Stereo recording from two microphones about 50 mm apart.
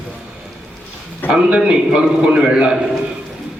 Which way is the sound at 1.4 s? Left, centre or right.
Centre.